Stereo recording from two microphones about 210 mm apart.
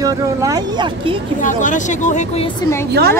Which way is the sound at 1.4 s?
35° left (ahead or behind).